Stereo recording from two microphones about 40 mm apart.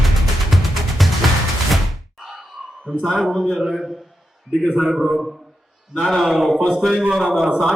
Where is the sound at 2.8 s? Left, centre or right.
Right.